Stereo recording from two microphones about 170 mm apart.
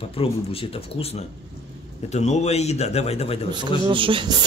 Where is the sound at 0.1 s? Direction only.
35° left (ahead or behind).